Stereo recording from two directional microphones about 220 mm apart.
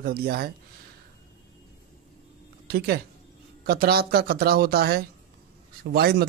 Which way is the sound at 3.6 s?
45° right (ahead or behind).